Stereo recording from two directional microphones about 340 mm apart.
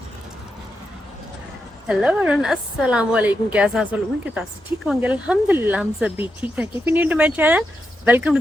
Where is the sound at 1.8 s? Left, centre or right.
Centre.